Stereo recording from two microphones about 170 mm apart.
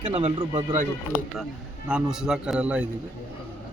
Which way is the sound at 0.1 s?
35° right (ahead or behind).